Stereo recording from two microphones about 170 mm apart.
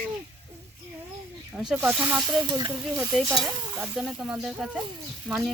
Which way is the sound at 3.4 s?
10° right (ahead or behind).